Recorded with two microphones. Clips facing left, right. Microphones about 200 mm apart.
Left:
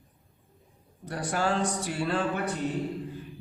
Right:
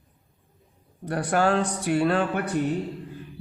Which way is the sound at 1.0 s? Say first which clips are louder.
Right 6 dB; 60° right (ahead or behind).